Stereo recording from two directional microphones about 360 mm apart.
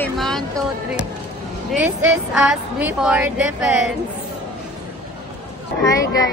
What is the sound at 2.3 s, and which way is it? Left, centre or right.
A woman's voice, centre.